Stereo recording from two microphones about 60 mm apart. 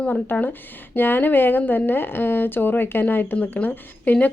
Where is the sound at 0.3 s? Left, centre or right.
Left.